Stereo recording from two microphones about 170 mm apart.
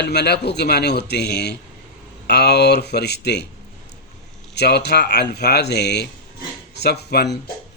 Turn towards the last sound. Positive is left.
turn(degrees=75)  # may be behind; listen again after turning